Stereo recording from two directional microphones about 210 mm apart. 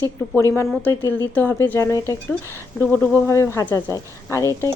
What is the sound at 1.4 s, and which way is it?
Speech, 10° left (ahead or behind).